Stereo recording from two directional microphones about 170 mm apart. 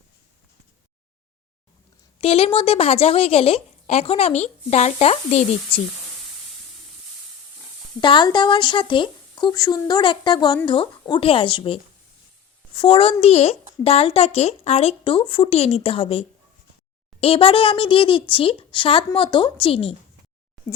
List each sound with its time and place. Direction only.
2.2 s a child's voice: 35° left (ahead or behind)
8.0 s a child's voice: 25° left (ahead or behind)